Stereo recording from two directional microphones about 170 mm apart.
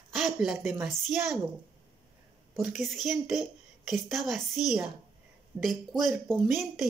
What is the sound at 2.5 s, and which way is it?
A child's voice, centre (ahead or behind).